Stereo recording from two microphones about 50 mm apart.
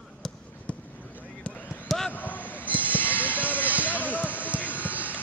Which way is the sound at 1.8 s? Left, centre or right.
Centre.